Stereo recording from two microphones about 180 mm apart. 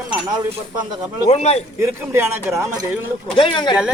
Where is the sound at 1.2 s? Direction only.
35° left (ahead or behind).